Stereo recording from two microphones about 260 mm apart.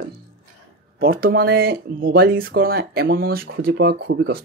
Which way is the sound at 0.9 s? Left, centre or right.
Right.